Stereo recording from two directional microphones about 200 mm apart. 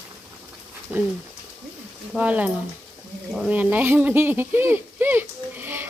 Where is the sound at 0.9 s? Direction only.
10° right (ahead or behind).